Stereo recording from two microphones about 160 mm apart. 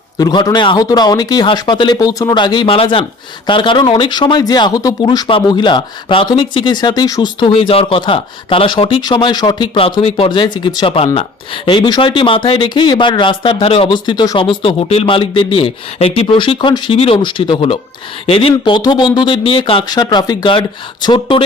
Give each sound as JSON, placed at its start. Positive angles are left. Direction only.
{"t": 0.2, "sound": "speech", "side_deg": 25}